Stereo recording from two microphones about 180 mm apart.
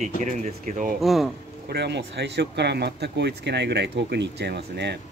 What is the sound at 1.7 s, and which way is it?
Speech, 70° right (ahead or behind).